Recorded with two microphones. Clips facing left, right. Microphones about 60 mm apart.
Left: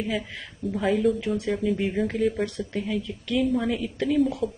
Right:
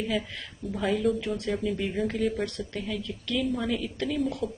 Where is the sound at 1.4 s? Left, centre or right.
Centre.